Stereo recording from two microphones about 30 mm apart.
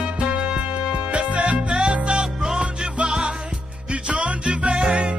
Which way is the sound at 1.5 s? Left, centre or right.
Right.